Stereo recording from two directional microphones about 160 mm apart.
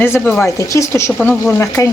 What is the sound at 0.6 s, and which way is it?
Speech, 20° left (ahead or behind).